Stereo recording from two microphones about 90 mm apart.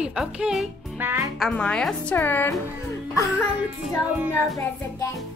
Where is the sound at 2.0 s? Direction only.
20° left (ahead or behind).